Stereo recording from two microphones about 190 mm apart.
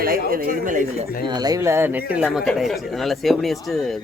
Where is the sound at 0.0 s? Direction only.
50° right (ahead or behind).